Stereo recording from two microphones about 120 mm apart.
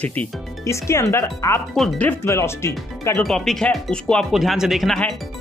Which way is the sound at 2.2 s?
25° left (ahead or behind).